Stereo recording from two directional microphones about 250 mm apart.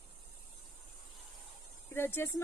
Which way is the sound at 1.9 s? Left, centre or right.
Centre.